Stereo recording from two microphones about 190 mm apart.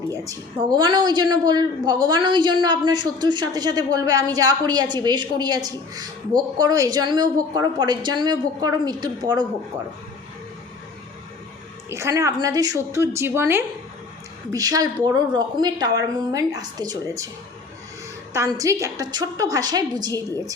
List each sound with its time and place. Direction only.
0.1 s a woman's voice: 20° right (ahead or behind)
11.9 s a woman's voice: 15° right (ahead or behind)
18.3 s a woman's voice: 20° right (ahead or behind)